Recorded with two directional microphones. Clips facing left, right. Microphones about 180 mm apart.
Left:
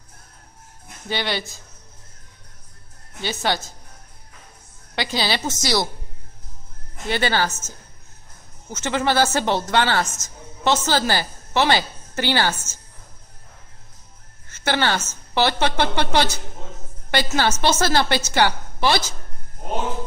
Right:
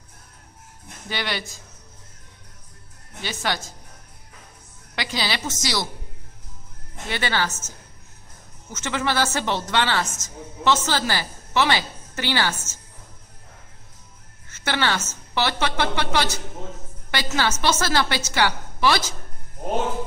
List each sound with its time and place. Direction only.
1.0 s a woman's voice: 30° left (ahead or behind)
3.2 s a woman's voice: 30° left (ahead or behind)
4.9 s a woman's voice: 30° left (ahead or behind)
7.1 s a woman's voice: 35° left (ahead or behind)
8.6 s a woman's voice: 35° left (ahead or behind)
14.5 s a woman's voice: 30° left (ahead or behind)